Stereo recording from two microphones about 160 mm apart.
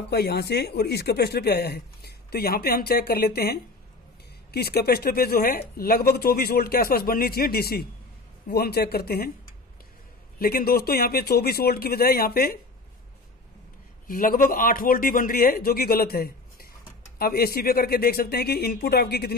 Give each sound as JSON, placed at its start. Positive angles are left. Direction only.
{"t": 0.1, "sound": "speech", "side_deg": 90}
{"t": 10.4, "sound": "speech", "side_deg": 70}
{"t": 14.0, "sound": "a man's voice", "side_deg": 65}